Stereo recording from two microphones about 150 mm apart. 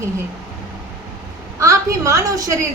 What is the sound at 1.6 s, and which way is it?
Speech, 20° right (ahead or behind).